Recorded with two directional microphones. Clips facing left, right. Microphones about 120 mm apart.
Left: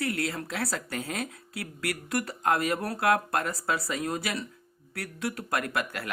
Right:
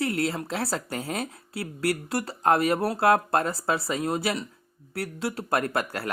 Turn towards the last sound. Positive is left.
turn(degrees=-35)  # may be behind; listen again after turning